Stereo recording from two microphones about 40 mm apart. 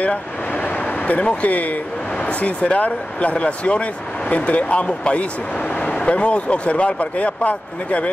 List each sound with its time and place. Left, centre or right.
0.5 s speech: left